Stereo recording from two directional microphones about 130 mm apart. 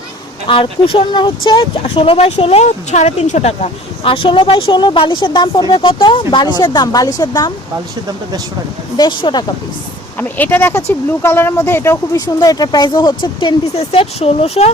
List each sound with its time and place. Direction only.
0.4 s speech: 40° left (ahead or behind); by 3.7 s 65° left (ahead or behind)
4.0 s speech: 45° left (ahead or behind)
9.0 s speech: 35° left (ahead or behind)
10.2 s speech: 15° left (ahead or behind); by 13.6 s 35° left (ahead or behind)
13.7 s speech: 50° left (ahead or behind)